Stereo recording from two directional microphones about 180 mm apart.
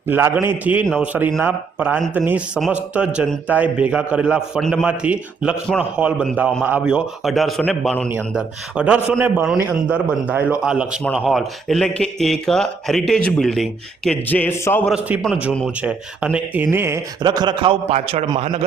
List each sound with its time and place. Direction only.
0.1 s a man's voice: 15° right (ahead or behind); by 14.8 s 10° left (ahead or behind)
14.8 s a man's voice: 5° right (ahead or behind); by 18.3 s 35° right (ahead or behind)